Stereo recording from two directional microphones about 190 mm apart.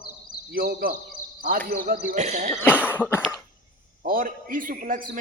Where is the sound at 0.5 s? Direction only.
50° right (ahead or behind).